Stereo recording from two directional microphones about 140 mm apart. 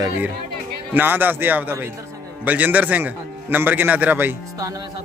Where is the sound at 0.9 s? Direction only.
15° right (ahead or behind).